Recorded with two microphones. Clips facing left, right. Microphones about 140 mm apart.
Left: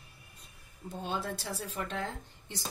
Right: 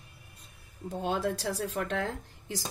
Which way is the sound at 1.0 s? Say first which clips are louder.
Right 6 dB; 90° right.